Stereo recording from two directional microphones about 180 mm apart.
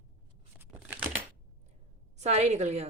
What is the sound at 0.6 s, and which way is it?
Crumpling, 10° right (ahead or behind).